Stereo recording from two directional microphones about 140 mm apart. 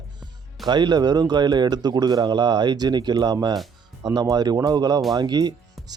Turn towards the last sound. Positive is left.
turn(degrees=-30)  # may be behind; listen again after turning